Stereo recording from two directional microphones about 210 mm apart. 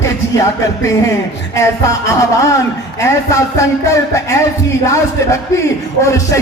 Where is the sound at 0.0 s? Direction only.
15° left (ahead or behind).